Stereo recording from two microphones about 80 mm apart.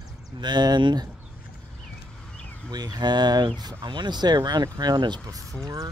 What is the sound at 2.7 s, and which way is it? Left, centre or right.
Speech, right.